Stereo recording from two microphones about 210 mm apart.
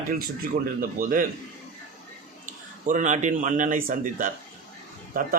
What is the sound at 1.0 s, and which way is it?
Speech, 40° right (ahead or behind).